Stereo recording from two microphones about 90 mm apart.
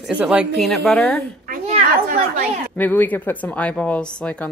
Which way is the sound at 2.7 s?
20° left (ahead or behind).